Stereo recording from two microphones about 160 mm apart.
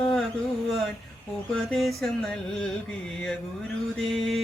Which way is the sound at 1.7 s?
Centre (ahead or behind).